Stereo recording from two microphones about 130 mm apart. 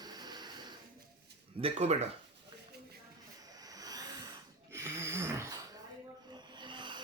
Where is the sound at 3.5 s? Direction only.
30° right (ahead or behind).